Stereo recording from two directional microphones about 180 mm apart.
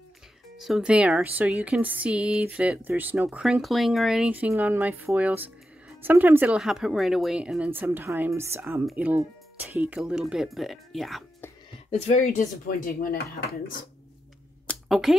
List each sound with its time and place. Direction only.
0.6 s speech: centre (ahead or behind)
11.9 s speech: 35° left (ahead or behind); by 13.8 s 50° left (ahead or behind)
14.7 s a sound: centre (ahead or behind)